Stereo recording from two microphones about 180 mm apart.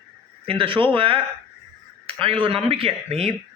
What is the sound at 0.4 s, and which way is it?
Speech, 30° right (ahead or behind).